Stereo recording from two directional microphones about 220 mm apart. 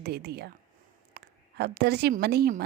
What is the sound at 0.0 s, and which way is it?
A woman's voice, 45° right (ahead or behind).